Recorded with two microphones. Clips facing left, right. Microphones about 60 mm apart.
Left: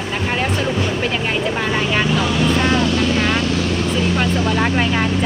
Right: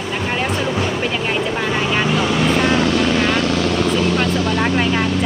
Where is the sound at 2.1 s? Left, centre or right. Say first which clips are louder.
Right 1 dB; right.